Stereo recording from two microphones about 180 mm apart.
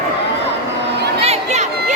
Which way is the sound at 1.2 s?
35° right (ahead or behind).